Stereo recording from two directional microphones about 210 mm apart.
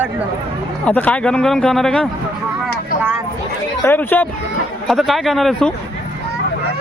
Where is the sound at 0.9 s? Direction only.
5° left (ahead or behind).